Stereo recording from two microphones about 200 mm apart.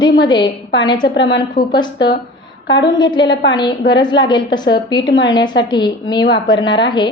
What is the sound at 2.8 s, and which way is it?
A woman's voice, 20° left (ahead or behind).